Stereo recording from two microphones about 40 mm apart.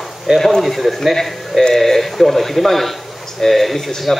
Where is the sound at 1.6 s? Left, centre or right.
Centre.